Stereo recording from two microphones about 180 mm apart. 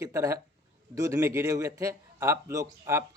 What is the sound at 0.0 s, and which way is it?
Speech, 15° right (ahead or behind).